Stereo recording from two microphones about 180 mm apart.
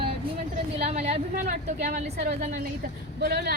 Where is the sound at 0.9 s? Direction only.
40° right (ahead or behind).